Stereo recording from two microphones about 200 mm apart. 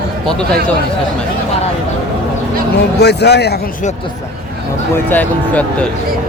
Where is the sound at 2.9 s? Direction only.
55° left (ahead or behind).